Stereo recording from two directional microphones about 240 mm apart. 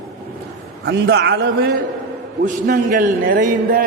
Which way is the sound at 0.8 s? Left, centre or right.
Right.